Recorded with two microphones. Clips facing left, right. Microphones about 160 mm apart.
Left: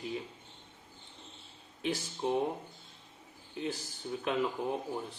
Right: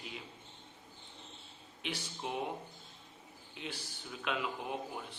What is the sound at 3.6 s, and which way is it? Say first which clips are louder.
Speech: left 7 dB; 35° left (ahead or behind).